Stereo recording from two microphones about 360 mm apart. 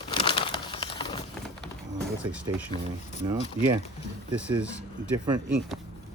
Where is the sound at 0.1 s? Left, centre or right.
Centre.